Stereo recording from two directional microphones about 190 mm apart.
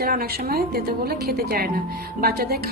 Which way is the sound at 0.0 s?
55° right (ahead or behind).